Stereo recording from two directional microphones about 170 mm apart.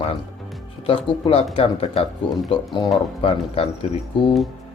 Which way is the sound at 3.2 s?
35° left (ahead or behind).